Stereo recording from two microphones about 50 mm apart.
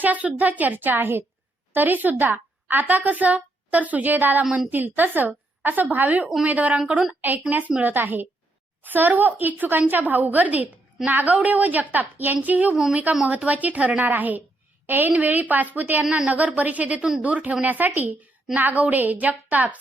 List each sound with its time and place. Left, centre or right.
0.0 s a woman's voice: right
4.4 s a woman's voice: centre
4.7 s a woman's voice: right
7.2 s a woman's voice: right
12.7 s a woman's voice: centre
13.2 s a woman's voice: right
16.0 s a woman's voice: centre
16.3 s a woman's voice: right
17.7 s a woman's voice: right